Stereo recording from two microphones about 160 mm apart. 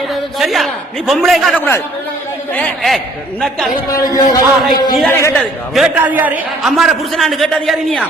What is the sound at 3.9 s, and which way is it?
A man's voice, 20° left (ahead or behind).